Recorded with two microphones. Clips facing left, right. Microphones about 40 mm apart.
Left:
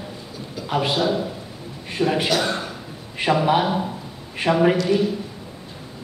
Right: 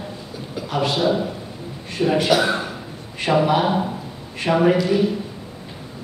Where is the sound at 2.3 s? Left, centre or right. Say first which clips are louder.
Right 4 dB; centre.